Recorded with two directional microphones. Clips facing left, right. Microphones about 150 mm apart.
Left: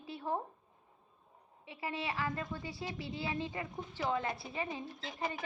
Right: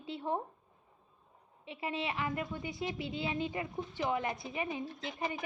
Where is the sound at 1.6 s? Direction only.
20° right (ahead or behind).